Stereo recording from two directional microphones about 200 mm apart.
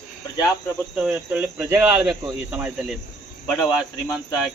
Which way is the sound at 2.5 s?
5° right (ahead or behind).